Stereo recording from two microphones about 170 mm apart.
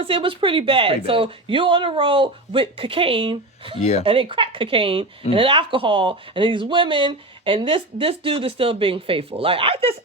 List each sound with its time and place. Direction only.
0.0 s speech: 30° right (ahead or behind)